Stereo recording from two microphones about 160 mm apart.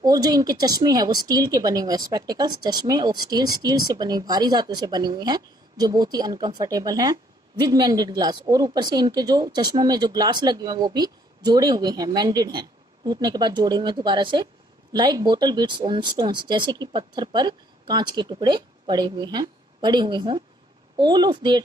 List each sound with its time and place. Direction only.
0.0 s a woman's voice: 25° right (ahead or behind)